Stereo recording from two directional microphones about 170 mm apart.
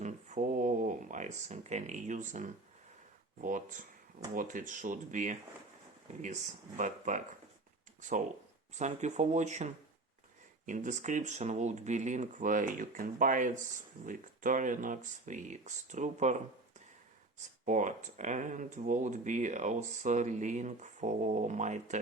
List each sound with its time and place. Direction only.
0.0 s a sound: 45° right (ahead or behind)
3.4 s speech: 50° right (ahead or behind)
8.7 s speech: 45° right (ahead or behind)
17.7 s speech: 45° right (ahead or behind)